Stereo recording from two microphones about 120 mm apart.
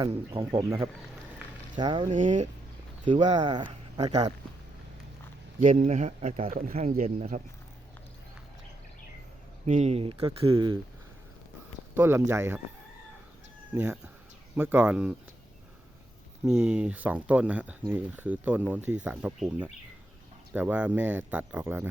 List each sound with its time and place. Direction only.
0.0 s speech: 45° right (ahead or behind)
1.7 s speech: 40° right (ahead or behind)
2.0 s speech: 85° right
3.3 s speech: 35° right (ahead or behind)
5.5 s speech: 90° right
9.6 s speech: 70° right (ahead or behind); by 10.8 s 45° right (ahead or behind)
11.9 s speech: 20° right (ahead or behind)
13.7 s speech: 15° right (ahead or behind)
16.5 s speech: 10° right (ahead or behind)